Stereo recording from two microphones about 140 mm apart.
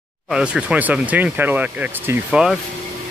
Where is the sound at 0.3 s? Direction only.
5° right (ahead or behind).